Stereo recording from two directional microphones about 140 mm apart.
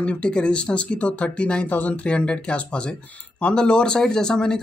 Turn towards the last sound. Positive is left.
turn(degrees=5)  # may be behind; listen again after turning